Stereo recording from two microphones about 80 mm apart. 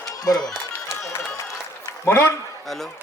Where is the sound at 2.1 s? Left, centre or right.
Left.